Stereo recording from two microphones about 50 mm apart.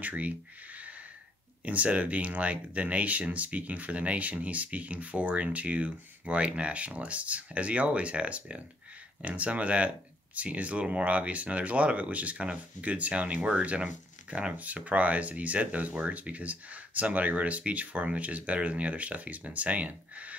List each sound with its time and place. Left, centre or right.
0.0 s speech: right